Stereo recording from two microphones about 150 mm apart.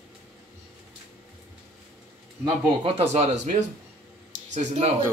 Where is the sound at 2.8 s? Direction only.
45° right (ahead or behind).